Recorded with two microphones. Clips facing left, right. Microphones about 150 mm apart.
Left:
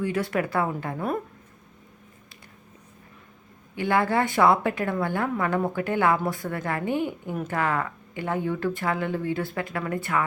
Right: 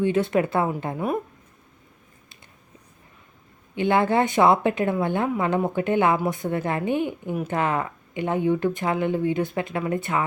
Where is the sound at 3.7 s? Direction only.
20° right (ahead or behind).